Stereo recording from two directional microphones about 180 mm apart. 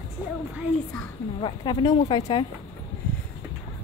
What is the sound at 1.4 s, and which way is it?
A woman's voice, 25° left (ahead or behind).